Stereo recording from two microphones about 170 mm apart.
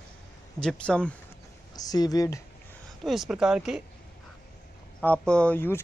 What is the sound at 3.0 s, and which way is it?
Speech, centre (ahead or behind).